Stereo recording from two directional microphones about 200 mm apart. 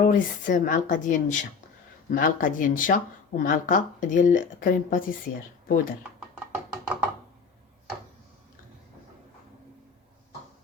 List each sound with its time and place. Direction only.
0.0 s a woman's voice: 40° left (ahead or behind)